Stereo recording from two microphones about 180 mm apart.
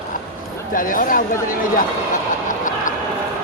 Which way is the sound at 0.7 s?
50° left (ahead or behind).